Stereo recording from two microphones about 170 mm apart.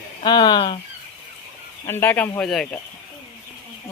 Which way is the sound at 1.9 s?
10° left (ahead or behind).